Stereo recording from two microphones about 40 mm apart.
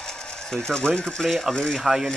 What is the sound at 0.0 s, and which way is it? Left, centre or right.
Ratchet, centre.